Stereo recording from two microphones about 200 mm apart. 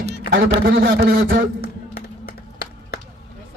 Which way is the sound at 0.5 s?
55° right (ahead or behind).